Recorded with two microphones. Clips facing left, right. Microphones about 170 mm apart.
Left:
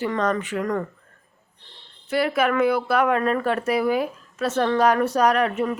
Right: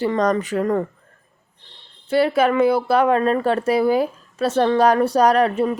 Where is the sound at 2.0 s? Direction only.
30° right (ahead or behind).